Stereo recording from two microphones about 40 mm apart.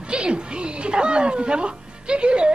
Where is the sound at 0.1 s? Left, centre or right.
Right.